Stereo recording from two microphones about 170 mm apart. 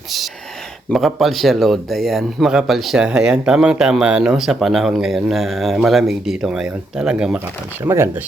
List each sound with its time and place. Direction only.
0.9 s speech: centre (ahead or behind)